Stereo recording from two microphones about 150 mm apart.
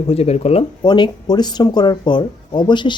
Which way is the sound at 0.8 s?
30° left (ahead or behind).